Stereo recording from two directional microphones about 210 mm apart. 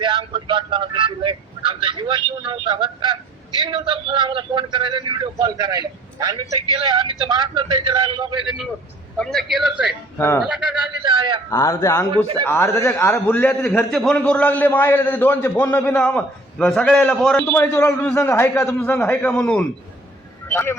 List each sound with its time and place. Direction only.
0.0 s vehicle: 20° right (ahead or behind)
3.6 s a man's voice: 25° right (ahead or behind)
9.1 s a man's voice: centre (ahead or behind)
10.2 s a man's voice: 10° left (ahead or behind)
10.4 s a man's voice: 5° right (ahead or behind)
11.0 s a sound: 25° right (ahead or behind)
11.5 s a man's voice: 15° left (ahead or behind)